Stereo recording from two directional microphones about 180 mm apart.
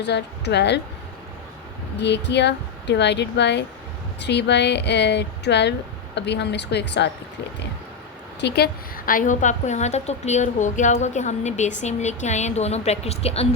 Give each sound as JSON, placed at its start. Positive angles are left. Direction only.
{"t": 0.0, "sound": "speech", "side_deg": 70}
{"t": 2.0, "sound": "speech", "side_deg": 70}
{"t": 8.4, "sound": "a woman's voice", "side_deg": 65}